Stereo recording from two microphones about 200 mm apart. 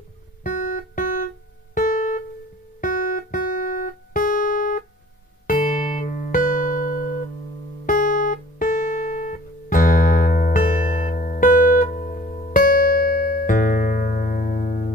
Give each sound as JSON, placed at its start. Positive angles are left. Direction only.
{"t": 0.4, "sound": "music", "side_deg": 40}
{"t": 1.8, "sound": "guitar", "side_deg": 40}
{"t": 2.8, "sound": "music", "side_deg": 45}